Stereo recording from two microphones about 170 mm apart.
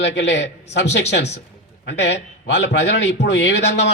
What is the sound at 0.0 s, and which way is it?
A man's voice, 90° left.